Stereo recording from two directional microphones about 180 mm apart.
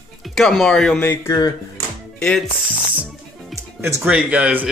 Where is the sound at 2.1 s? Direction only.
5° left (ahead or behind).